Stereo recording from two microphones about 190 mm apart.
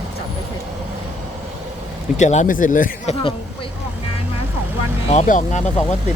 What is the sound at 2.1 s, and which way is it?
Speech, 40° left (ahead or behind).